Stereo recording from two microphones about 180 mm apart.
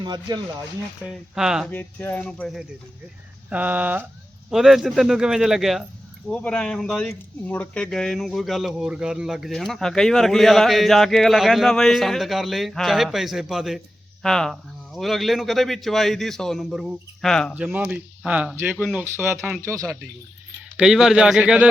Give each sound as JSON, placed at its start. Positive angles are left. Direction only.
{"t": 0.0, "sound": "speech", "side_deg": -25}
{"t": 1.4, "sound": "speech", "side_deg": -5}
{"t": 1.7, "sound": "speech", "side_deg": 10}
{"t": 3.5, "sound": "speech", "side_deg": -10}
{"t": 17.5, "sound": "speech", "side_deg": -10}
{"t": 19.6, "sound": "speech", "side_deg": -15}
{"t": 20.7, "sound": "speech", "side_deg": -5}